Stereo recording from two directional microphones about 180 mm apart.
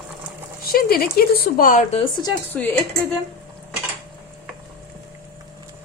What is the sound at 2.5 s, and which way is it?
Speech, 10° left (ahead or behind).